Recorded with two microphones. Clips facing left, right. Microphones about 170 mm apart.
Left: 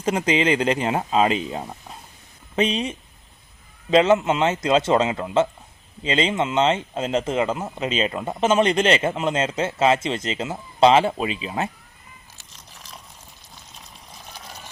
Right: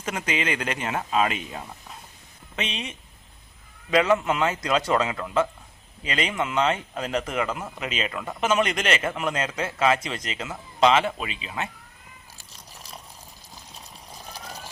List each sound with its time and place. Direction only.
0.0 s speech: 30° left (ahead or behind)
3.8 s speech: 25° left (ahead or behind)
14.2 s vehicle: 35° right (ahead or behind)